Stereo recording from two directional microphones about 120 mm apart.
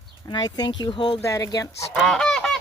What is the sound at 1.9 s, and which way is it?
Goose, centre (ahead or behind).